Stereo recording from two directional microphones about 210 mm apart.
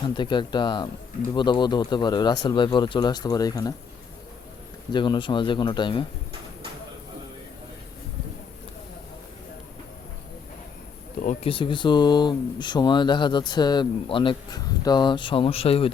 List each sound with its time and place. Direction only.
0.2 s speech: 20° left (ahead or behind)
4.9 s speech: 20° left (ahead or behind)
11.2 s speech: 30° left (ahead or behind)